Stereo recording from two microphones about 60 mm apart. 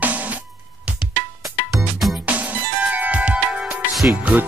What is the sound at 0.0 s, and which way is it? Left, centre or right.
Music, right.